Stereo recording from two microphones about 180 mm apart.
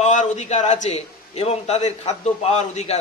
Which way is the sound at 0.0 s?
40° left (ahead or behind).